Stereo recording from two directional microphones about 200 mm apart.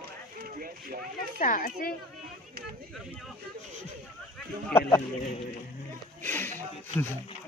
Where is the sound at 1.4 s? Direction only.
45° left (ahead or behind).